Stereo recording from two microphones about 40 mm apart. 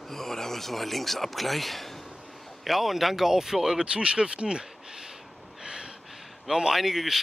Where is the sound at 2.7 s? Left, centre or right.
Centre.